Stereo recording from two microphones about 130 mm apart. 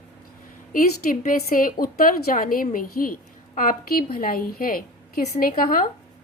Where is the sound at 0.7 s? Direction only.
90° left.